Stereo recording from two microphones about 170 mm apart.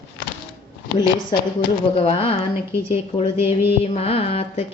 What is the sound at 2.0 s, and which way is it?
Speech, 35° left (ahead or behind).